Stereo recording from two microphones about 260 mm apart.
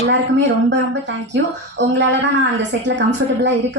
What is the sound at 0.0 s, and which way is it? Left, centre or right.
Speech, right.